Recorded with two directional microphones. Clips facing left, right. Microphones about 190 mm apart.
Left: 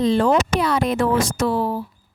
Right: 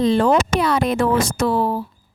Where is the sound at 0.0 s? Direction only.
65° right (ahead or behind).